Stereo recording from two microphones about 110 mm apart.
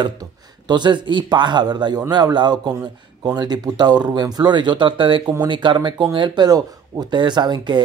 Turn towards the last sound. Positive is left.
turn(degrees=-40)  # may be behind; listen again after turning